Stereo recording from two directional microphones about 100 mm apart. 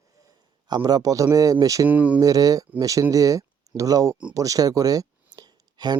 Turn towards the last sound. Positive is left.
turn(degrees=-45)  # may be behind; listen again after turning